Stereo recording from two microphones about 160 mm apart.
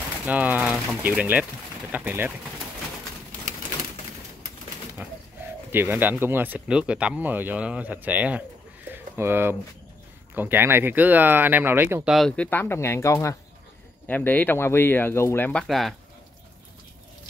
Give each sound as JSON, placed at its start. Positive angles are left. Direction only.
{"t": 0.3, "sound": "speech", "side_deg": -10}
{"t": 5.0, "sound": "speech", "side_deg": -10}
{"t": 8.9, "sound": "a sound", "side_deg": -15}
{"t": 10.3, "sound": "speech", "side_deg": -10}
{"t": 12.1, "sound": "speech", "side_deg": 5}
{"t": 15.6, "sound": "speech", "side_deg": 0}